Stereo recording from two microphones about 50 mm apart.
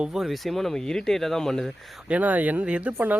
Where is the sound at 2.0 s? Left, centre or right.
Right.